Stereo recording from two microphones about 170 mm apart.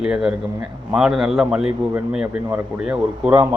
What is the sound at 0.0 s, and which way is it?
A man's voice, 5° right (ahead or behind).